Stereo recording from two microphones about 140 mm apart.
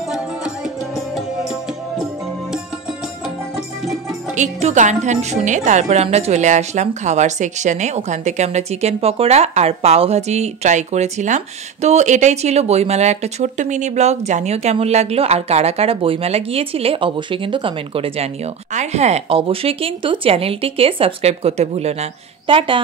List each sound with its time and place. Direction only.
0.9 s music: centre (ahead or behind)
4.4 s speech: 55° right (ahead or behind); by 22.8 s 40° right (ahead or behind)